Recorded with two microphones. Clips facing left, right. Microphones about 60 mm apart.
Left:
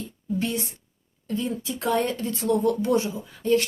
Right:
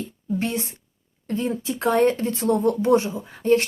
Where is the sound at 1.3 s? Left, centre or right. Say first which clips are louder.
Right 3 dB; right.